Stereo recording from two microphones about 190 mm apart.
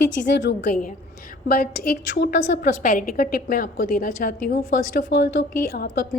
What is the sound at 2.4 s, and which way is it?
A woman's voice, 40° left (ahead or behind).